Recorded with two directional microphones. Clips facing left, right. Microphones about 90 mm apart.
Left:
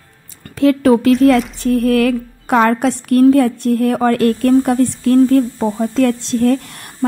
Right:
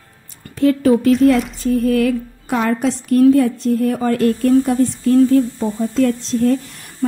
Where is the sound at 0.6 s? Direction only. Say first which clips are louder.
Left 2 dB; 80° left.